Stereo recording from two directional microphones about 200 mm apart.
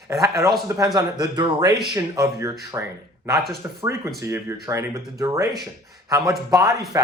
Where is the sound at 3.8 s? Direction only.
15° right (ahead or behind).